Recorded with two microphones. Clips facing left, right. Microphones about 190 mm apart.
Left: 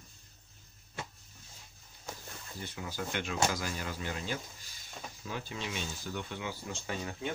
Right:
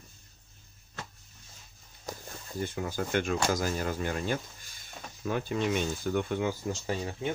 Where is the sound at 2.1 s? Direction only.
40° right (ahead or behind).